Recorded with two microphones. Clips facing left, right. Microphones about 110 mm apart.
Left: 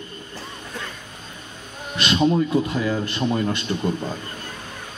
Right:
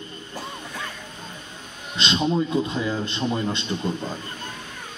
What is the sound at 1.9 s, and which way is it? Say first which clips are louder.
A man's voice: left 3 dB; 25° right (ahead or behind).